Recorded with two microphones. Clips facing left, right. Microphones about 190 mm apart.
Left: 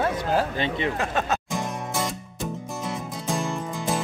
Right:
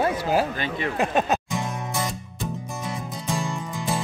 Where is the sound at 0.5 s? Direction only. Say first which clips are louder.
Left 2 dB; 25° left (ahead or behind).